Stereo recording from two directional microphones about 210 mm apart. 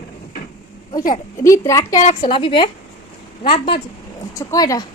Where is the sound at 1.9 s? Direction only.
30° left (ahead or behind).